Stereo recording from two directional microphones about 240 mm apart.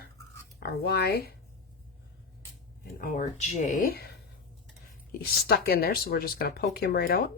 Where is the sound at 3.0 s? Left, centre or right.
Left.